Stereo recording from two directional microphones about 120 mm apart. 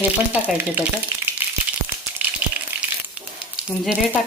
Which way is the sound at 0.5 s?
15° right (ahead or behind).